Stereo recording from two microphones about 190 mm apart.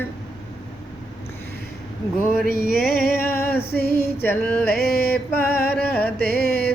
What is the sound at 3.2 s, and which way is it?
Female singing, 10° left (ahead or behind).